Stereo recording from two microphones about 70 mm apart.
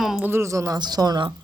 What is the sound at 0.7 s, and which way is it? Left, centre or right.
Speech, right.